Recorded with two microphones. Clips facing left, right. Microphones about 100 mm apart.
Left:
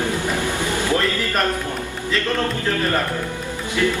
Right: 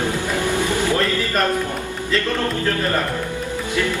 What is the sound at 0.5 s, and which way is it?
Speech, 20° left (ahead or behind).